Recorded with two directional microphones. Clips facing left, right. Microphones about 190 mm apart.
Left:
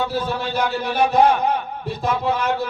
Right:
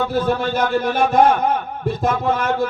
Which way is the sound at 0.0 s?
50° right (ahead or behind).